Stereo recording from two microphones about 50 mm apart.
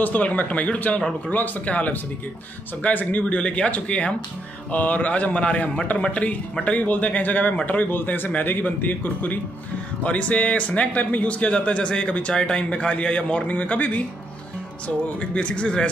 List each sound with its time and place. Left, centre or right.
0.0 s speech: left